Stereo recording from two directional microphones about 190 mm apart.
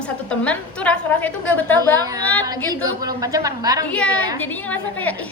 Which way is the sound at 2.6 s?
20° right (ahead or behind).